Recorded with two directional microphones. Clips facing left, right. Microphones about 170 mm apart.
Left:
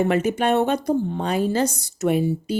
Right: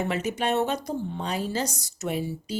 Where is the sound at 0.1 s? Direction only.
55° left (ahead or behind).